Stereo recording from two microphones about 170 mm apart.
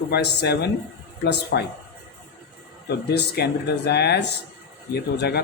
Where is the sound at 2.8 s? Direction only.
75° left (ahead or behind).